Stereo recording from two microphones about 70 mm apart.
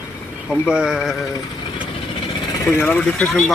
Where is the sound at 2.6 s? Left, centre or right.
Left.